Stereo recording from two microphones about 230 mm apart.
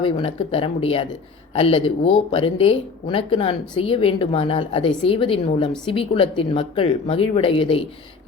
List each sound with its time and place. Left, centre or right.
0.0 s speech: left